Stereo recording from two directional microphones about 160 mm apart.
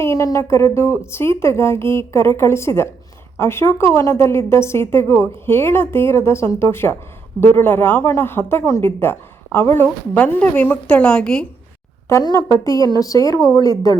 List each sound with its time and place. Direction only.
0.0 s speech: 20° left (ahead or behind)
12.0 s speech: 20° left (ahead or behind)